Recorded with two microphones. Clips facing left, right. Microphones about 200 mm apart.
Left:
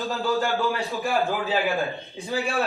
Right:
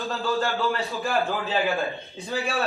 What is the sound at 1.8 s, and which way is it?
Speech, 15° left (ahead or behind).